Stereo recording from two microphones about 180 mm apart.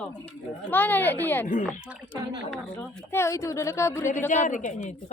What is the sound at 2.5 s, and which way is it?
Speech, 10° left (ahead or behind).